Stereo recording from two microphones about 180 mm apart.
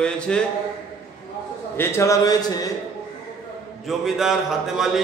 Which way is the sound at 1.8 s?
15° left (ahead or behind).